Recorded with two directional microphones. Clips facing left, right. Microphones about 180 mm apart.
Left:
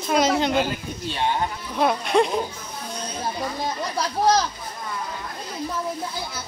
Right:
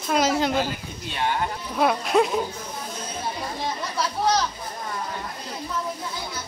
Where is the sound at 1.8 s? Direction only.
Centre (ahead or behind).